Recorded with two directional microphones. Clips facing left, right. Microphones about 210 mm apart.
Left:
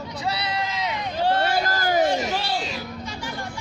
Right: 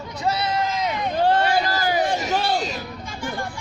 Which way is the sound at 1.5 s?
45° left (ahead or behind).